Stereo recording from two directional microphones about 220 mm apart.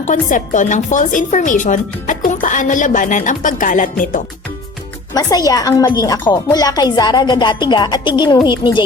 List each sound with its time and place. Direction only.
0.0 s speech: 35° left (ahead or behind)
5.1 s speech: 15° left (ahead or behind)